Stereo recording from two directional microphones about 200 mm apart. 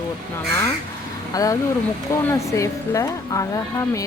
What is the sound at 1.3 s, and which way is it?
Speech, 15° left (ahead or behind).